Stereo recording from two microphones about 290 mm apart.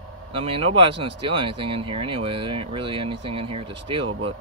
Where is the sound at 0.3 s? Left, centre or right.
Centre.